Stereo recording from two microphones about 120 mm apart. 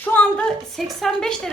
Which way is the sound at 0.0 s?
10° left (ahead or behind).